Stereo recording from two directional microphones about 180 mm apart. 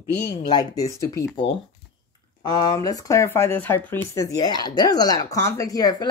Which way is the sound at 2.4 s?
20° left (ahead or behind).